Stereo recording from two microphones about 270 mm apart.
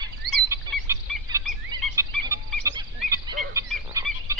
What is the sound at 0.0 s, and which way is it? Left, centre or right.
Chicken, centre.